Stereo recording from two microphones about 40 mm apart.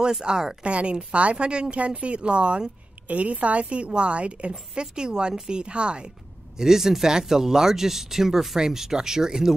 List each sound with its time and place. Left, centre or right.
0.2 s speech: centre
0.7 s a woman's voice: right
6.6 s speech: centre